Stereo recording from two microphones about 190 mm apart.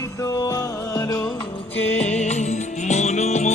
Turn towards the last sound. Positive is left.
turn(degrees=35)  # may be behind; listen again after turning